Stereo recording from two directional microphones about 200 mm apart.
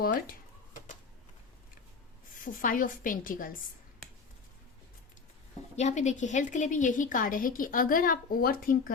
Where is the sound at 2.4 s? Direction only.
45° left (ahead or behind).